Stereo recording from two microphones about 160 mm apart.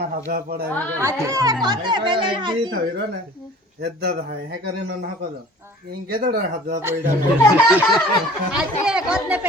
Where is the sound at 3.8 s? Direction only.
75° right (ahead or behind).